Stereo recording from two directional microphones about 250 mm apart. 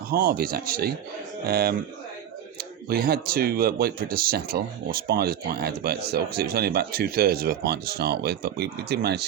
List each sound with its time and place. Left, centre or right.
0.1 s speech: right